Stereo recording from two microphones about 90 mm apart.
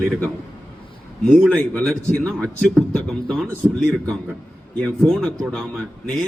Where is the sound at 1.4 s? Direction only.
25° right (ahead or behind).